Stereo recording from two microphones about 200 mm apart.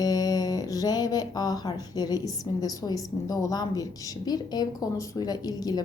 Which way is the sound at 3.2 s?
20° left (ahead or behind).